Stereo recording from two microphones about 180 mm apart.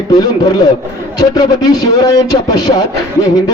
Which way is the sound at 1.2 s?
20° left (ahead or behind).